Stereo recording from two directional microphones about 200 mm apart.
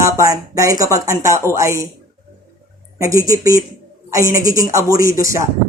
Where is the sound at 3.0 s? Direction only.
15° right (ahead or behind).